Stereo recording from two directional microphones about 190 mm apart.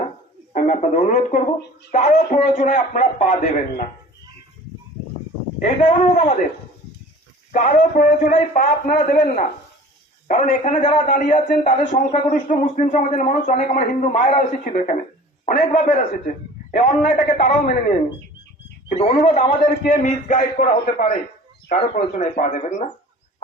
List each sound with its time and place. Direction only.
0.5 s a man's voice: 40° left (ahead or behind)
5.6 s a man's voice: 40° left (ahead or behind)
7.5 s a man's voice: 45° left (ahead or behind)